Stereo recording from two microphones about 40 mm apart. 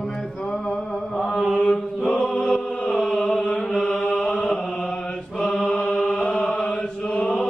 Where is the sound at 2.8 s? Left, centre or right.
Centre.